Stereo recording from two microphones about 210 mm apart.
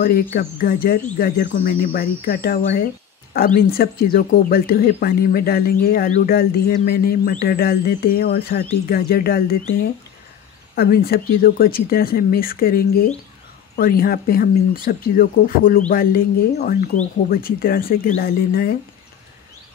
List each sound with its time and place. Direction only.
0.0 s speech: 45° left (ahead or behind)
10.7 s speech: 45° left (ahead or behind)